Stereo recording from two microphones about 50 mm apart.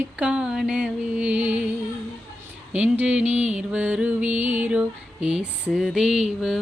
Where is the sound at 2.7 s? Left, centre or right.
Right.